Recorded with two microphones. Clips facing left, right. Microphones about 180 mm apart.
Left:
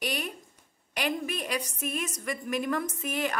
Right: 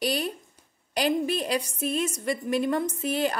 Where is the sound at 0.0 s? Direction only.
30° right (ahead or behind).